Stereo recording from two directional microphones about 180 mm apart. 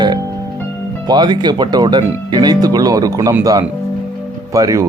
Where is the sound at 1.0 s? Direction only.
25° right (ahead or behind).